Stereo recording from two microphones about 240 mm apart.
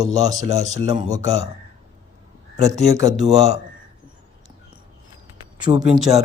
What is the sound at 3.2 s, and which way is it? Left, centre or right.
Speech, right.